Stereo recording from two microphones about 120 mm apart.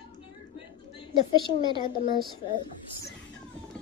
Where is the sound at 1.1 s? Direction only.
40° right (ahead or behind).